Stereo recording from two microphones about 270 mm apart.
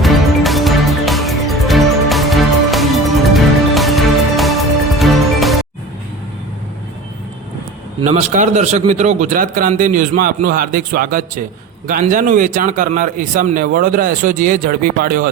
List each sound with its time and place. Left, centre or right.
0.0 s music: centre
8.0 s speech: right